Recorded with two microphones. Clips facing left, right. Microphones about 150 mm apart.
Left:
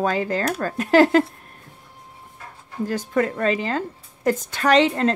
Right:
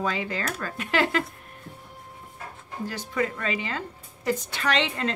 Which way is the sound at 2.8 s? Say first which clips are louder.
Left 6 dB; 50° left (ahead or behind).